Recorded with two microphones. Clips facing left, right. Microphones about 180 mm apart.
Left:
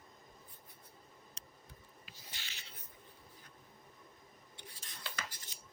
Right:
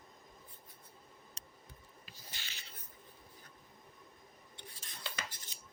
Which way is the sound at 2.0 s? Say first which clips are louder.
Right 1 dB; 40° right (ahead or behind).